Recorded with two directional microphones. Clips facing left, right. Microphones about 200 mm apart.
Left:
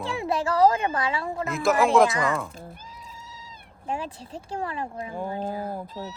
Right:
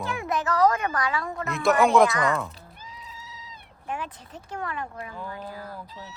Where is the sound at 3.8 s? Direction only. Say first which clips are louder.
Left 3 dB; 30° left (ahead or behind).